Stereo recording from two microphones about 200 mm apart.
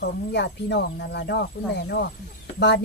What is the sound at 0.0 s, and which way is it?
Speech, 55° left (ahead or behind).